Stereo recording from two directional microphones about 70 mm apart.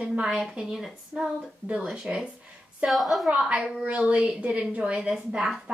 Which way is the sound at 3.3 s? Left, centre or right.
Centre.